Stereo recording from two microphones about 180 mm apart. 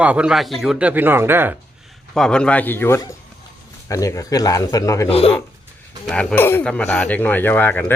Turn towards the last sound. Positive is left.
turn(degrees=10)  # may be behind; listen again after turning